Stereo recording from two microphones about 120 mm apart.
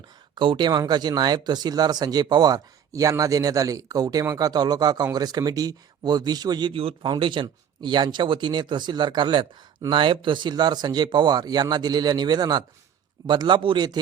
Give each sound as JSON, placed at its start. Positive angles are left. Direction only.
{"t": 0.3, "sound": "speech", "side_deg": -40}